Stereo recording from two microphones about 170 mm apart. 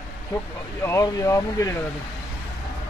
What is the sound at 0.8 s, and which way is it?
Speech, 15° left (ahead or behind).